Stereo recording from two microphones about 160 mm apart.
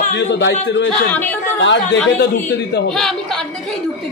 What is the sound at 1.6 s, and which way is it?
Speech, 90° left.